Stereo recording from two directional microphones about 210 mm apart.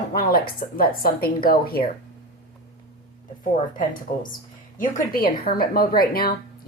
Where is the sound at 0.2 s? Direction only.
45° left (ahead or behind).